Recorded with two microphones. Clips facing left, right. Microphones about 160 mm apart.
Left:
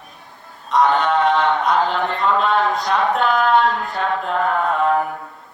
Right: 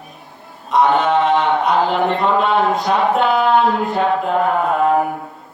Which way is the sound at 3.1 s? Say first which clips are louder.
Right 1 dB; 5° right (ahead or behind).